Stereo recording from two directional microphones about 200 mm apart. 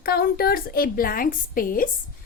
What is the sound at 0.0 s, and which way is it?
A woman's voice, 50° left (ahead or behind).